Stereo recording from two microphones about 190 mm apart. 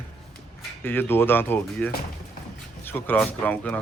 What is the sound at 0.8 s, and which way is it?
Speech, 10° left (ahead or behind).